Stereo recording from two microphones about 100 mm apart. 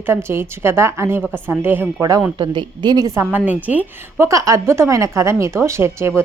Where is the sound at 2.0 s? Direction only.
35° right (ahead or behind).